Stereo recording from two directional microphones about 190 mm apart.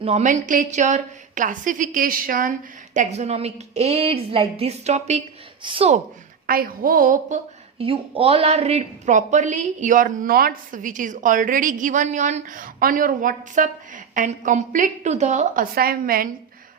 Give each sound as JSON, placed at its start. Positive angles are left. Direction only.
{"t": 0.0, "sound": "a woman's voice", "side_deg": -35}
{"t": 6.5, "sound": "speech", "side_deg": -50}
{"t": 7.8, "sound": "speech", "side_deg": -30}
{"t": 15.7, "sound": "speech", "side_deg": -50}